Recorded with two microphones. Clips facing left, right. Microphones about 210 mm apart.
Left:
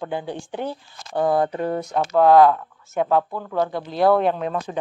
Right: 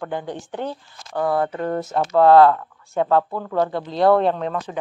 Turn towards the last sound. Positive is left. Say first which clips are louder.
# even
turn(degrees=10)  # may be behind; listen again after turning